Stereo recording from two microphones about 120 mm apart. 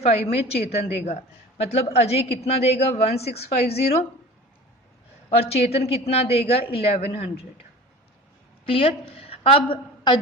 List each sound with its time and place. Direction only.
0.3 s a woman's voice: 60° left (ahead or behind)
5.3 s a woman's voice: 60° left (ahead or behind)
8.6 s a woman's voice: 50° left (ahead or behind)